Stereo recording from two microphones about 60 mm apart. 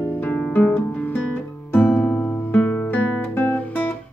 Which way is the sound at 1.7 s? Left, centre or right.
Left.